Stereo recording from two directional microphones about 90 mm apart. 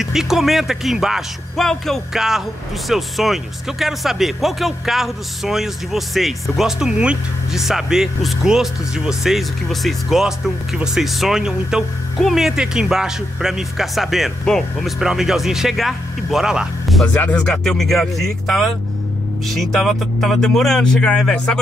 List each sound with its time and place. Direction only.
0.0 s speech: 5° right (ahead or behind)
17.1 s speech: 20° left (ahead or behind)
17.5 s speech: 5° left (ahead or behind)